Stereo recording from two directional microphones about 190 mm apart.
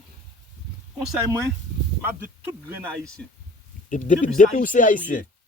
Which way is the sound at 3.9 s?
40° left (ahead or behind).